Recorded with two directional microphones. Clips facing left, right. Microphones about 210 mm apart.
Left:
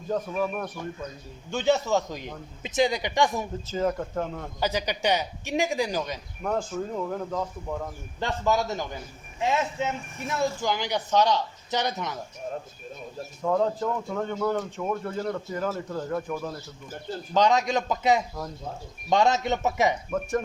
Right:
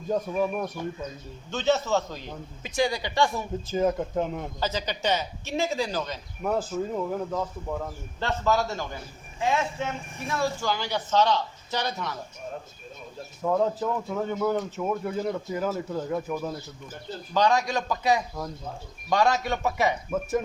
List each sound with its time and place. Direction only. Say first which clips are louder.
0.1 s a man's voice: right 2 dB; 15° right (ahead or behind)
1.5 s a man's voice: left 1 dB; 15° left (ahead or behind)
3.7 s a man's voice: right 3 dB; 15° right (ahead or behind)
4.6 s speech: left 3 dB; 15° left (ahead or behind)
6.4 s speech: right 2 dB; 5° right (ahead or behind)
8.2 s speech: even; 15° left (ahead or behind)
10.2 s speech: left 1 dB; 20° left (ahead or behind)
13.4 s a man's voice: even; 5° right (ahead or behind)
17.3 s a man's voice: left 1 dB; 20° left (ahead or behind)
20.1 s speech: even; 5° right (ahead or behind)